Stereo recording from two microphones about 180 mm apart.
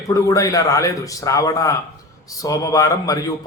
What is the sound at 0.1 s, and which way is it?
A man's voice, 20° left (ahead or behind).